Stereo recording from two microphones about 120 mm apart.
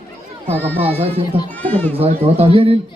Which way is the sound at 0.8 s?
55° right (ahead or behind).